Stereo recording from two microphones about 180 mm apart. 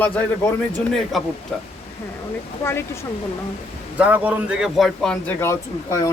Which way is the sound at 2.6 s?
15° left (ahead or behind).